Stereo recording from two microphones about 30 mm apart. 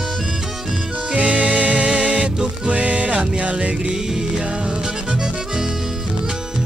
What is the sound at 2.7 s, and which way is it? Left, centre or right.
Music, right.